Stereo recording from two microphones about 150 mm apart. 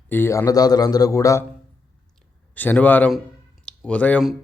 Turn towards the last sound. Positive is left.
turn(degrees=10)  # may be behind; listen again after turning